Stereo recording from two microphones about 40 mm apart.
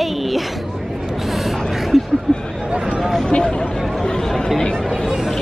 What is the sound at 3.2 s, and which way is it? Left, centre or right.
Speech, left.